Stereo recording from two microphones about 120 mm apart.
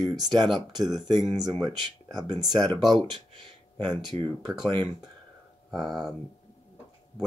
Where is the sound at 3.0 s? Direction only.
40° right (ahead or behind).